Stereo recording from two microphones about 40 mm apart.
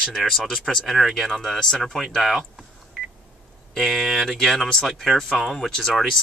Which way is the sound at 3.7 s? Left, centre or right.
Centre.